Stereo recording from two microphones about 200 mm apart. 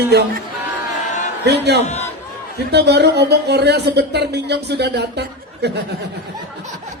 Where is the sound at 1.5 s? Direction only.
60° right (ahead or behind).